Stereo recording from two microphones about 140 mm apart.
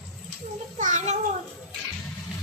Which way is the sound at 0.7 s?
60° right (ahead or behind).